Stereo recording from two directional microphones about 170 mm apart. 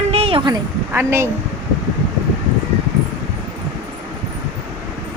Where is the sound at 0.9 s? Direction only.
15° right (ahead or behind).